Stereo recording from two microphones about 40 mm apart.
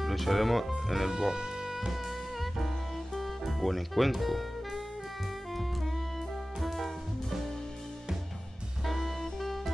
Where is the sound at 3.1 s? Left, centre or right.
Centre.